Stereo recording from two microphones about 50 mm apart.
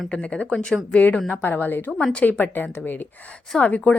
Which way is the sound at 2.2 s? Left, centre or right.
Left.